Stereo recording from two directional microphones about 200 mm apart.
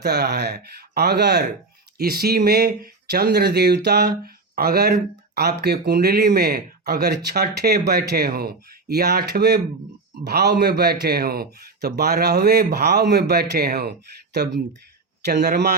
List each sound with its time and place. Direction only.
0.0 s speech: 55° right (ahead or behind)